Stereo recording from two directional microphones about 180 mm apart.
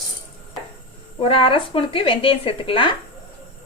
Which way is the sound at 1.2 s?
30° left (ahead or behind).